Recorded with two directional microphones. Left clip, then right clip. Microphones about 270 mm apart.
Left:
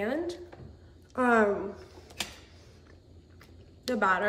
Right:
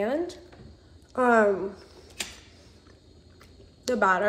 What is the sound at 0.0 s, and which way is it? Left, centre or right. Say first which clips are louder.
A woman's voice: right 4 dB; centre.